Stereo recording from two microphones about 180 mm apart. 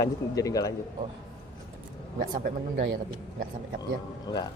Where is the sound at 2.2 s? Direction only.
50° right (ahead or behind).